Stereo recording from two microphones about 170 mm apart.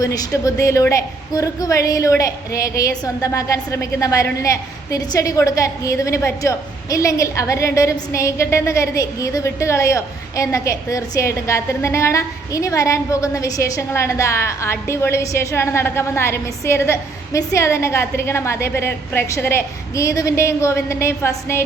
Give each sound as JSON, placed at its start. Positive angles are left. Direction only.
{"t": 0.0, "sound": "a woman's voice", "side_deg": 20}